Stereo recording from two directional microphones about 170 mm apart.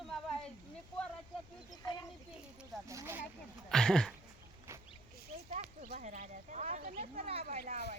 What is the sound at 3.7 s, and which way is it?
Speech, 5° left (ahead or behind).